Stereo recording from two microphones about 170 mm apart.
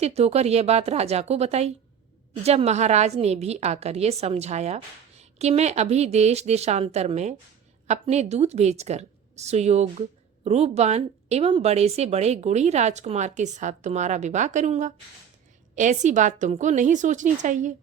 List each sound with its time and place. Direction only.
0.0 s a woman's voice: 40° right (ahead or behind)